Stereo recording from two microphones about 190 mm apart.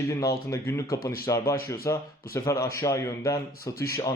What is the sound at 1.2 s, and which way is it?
A man's voice, 15° left (ahead or behind).